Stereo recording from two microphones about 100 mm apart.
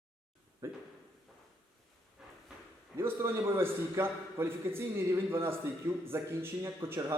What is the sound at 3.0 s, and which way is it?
A man's voice, 25° right (ahead or behind).